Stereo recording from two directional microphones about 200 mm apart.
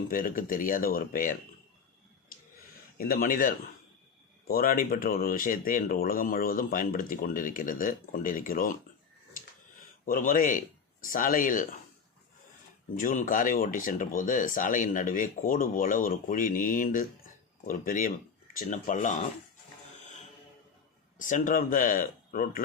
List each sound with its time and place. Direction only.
0.1 s speech: 45° left (ahead or behind)
3.0 s speech: 45° left (ahead or behind)
10.1 s speech: 45° left (ahead or behind)
13.0 s speech: 40° left (ahead or behind)
21.2 s speech: 40° left (ahead or behind)